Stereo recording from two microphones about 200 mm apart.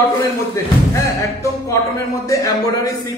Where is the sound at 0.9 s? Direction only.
15° left (ahead or behind).